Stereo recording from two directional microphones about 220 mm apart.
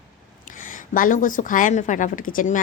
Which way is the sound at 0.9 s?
35° left (ahead or behind).